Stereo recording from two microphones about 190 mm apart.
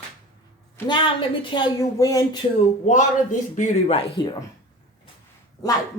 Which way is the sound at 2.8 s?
40° left (ahead or behind).